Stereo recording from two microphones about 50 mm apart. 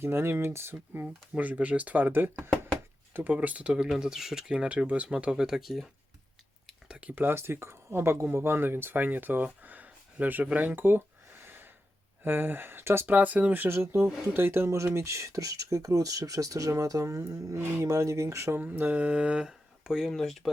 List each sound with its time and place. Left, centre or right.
0.0 s speech: right
1.4 s speech: right
3.3 s speech: right
3.7 s speech: centre
7.3 s speech: right
10.8 s a sound: right
12.2 s speech: right
13.1 s speech: right
13.7 s speech: right
14.9 s speech: right
18.5 s speech: right; by 20.1 s centre
20.1 s speech: centre